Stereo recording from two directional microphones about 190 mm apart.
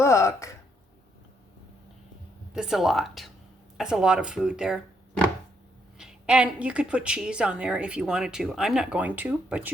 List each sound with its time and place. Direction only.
0.0 s a sound: 15° left (ahead or behind)
2.5 s a woman's voice: 5° right (ahead or behind)
6.0 s a woman's voice: 5° right (ahead or behind)